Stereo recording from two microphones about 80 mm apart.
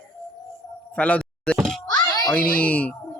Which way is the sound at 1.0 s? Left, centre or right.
Centre.